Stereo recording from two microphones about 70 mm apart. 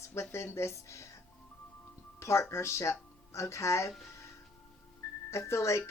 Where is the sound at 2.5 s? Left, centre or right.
Left.